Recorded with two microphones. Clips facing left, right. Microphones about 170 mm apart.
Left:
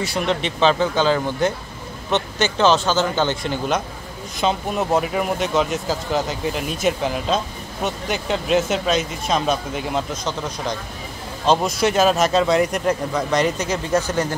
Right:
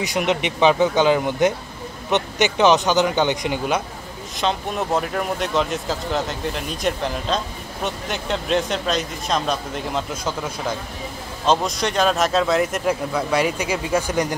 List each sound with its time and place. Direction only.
0.0 s speech: 15° right (ahead or behind)
4.4 s speech: centre (ahead or behind)